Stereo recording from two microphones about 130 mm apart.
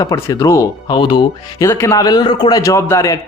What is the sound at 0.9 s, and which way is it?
Speech, 35° left (ahead or behind).